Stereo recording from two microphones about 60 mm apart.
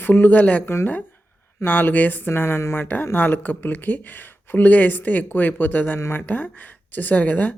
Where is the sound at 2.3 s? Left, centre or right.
Left.